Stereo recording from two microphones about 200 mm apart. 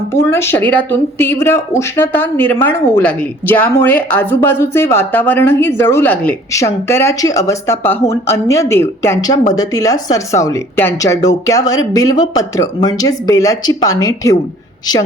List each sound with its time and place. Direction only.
0.1 s speech: 10° left (ahead or behind)